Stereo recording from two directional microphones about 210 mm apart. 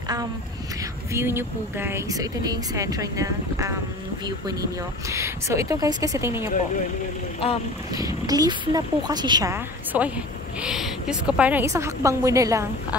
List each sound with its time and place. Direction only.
1.1 s speech: 10° right (ahead or behind)
5.1 s speech: 15° right (ahead or behind)
7.9 s speech: 15° right (ahead or behind)